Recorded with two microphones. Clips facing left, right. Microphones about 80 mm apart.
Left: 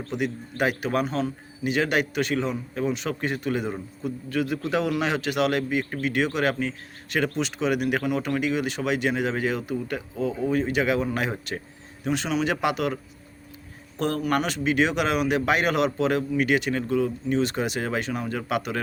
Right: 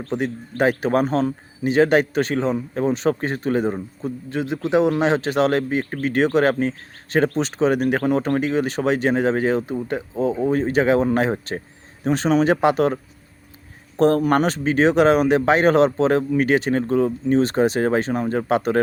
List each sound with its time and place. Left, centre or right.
0.0 s speech: right